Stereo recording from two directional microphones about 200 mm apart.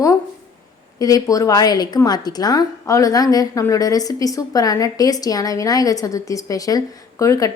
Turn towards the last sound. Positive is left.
turn(degrees=15)  # may be behind; listen again after turning